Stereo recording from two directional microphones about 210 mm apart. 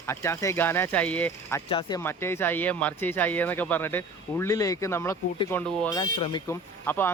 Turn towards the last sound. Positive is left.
turn(degrees=10)  # may be behind; listen again after turning